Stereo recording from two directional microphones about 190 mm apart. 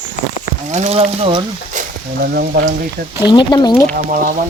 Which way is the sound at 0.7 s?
35° right (ahead or behind).